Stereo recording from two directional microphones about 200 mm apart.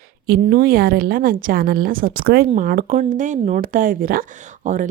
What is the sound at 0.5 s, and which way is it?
Speech, 50° right (ahead or behind).